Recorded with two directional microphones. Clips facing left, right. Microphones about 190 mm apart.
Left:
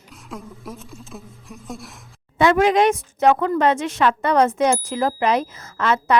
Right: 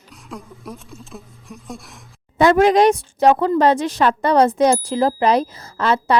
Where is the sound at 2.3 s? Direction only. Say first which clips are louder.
Right 3 dB; 40° right (ahead or behind).